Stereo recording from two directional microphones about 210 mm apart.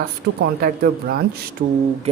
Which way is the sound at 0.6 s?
45° right (ahead or behind).